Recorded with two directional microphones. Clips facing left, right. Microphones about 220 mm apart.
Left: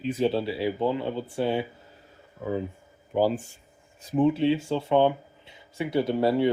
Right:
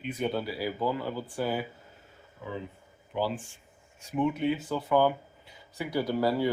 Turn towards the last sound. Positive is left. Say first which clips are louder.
# left 4 dB
turn(degrees=25)  # may be behind; listen again after turning